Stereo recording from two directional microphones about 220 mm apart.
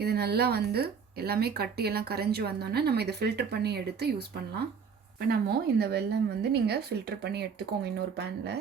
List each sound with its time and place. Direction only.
0.0 s speech: 45° right (ahead or behind)
5.3 s speech: 45° right (ahead or behind)